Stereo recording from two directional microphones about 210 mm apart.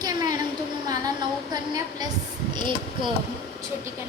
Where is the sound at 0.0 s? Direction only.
20° right (ahead or behind).